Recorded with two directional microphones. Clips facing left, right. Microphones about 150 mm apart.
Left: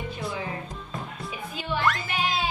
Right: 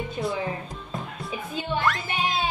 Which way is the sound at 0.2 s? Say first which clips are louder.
Right 8 dB; 30° right (ahead or behind).